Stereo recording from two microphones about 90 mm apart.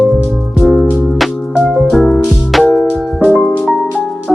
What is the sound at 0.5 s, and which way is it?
Music, centre (ahead or behind).